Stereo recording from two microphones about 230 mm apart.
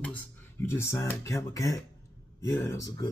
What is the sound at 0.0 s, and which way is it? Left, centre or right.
Speech, centre.